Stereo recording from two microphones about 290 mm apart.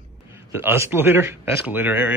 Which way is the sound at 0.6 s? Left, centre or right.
Centre.